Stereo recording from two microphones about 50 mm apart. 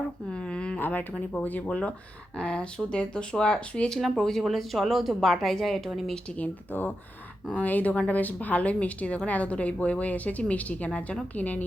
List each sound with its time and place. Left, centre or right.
0.3 s a sound: centre
0.8 s speech: left
1.1 s speech: left
1.5 s speech: left
2.4 s speech: centre
6.3 s speech: left